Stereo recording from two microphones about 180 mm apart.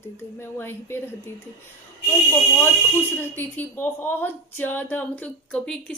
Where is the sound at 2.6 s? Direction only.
10° left (ahead or behind).